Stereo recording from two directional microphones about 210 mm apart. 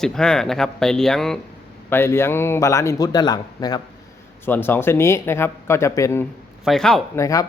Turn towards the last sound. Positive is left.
turn(degrees=15)  # may be behind; listen again after turning